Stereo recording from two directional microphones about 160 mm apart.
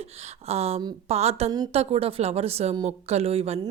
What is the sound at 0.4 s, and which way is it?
Speech, 40° right (ahead or behind).